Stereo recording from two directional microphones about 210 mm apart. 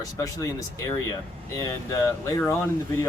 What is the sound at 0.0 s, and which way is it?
Speech, 15° left (ahead or behind).